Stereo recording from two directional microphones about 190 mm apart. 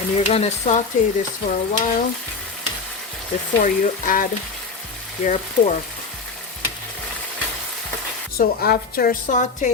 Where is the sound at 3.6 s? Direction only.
45° left (ahead or behind).